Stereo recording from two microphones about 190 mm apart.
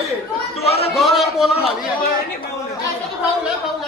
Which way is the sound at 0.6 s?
30° left (ahead or behind).